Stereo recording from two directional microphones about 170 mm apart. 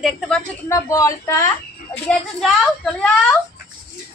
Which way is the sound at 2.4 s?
5° left (ahead or behind).